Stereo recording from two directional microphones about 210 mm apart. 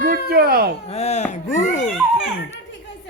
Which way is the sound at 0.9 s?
30° left (ahead or behind).